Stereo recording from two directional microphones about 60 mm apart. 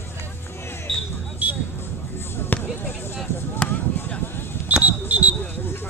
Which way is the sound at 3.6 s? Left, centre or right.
Centre.